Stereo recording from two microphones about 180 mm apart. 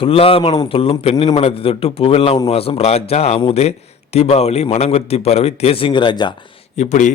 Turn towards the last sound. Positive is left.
turn(degrees=40)  # may be behind; listen again after turning